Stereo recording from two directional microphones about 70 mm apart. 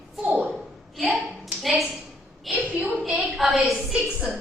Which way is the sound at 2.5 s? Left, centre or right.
Right.